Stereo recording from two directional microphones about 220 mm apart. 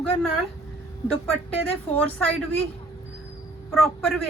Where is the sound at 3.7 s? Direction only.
Centre (ahead or behind).